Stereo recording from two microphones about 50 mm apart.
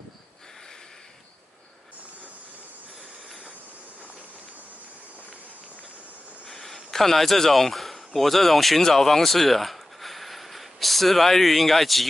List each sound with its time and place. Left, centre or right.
6.4 s speech: centre